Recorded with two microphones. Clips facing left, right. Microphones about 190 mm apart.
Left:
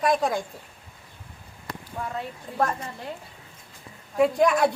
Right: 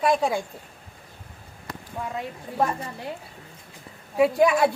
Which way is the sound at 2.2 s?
10° right (ahead or behind).